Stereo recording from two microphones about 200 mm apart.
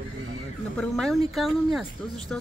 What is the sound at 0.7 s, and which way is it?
Speech, 5° left (ahead or behind).